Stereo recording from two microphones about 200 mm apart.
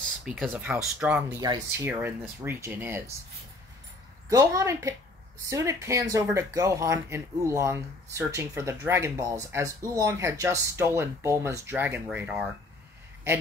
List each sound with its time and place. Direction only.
0.2 s speech: 5° right (ahead or behind)
4.3 s speech: 15° right (ahead or behind)